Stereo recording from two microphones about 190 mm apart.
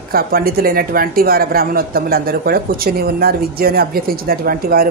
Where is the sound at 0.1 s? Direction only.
50° right (ahead or behind).